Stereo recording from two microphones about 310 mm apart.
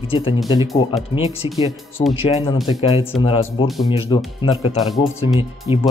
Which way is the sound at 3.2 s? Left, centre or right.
Centre.